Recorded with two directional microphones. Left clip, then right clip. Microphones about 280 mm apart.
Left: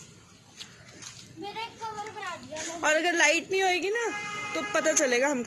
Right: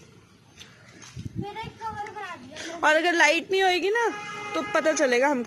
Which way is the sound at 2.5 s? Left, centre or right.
Centre.